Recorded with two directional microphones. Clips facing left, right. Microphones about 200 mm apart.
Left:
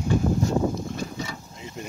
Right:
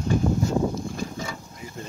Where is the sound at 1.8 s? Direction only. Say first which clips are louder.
Left 1 dB; 20° left (ahead or behind).